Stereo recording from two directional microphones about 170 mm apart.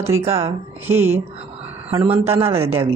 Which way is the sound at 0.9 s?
15° right (ahead or behind).